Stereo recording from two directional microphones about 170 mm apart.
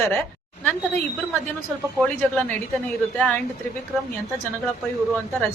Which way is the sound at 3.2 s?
10° left (ahead or behind).